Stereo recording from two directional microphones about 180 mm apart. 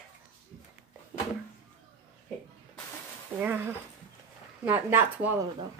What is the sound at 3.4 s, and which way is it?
Speech, 10° right (ahead or behind).